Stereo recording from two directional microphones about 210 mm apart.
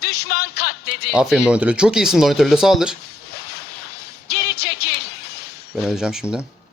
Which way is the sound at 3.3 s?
50° left (ahead or behind).